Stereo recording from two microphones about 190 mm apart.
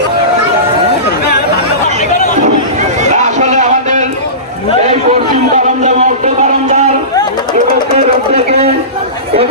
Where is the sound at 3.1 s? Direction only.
40° right (ahead or behind).